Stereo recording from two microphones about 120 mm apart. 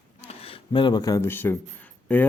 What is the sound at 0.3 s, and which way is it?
Speech, 50° left (ahead or behind).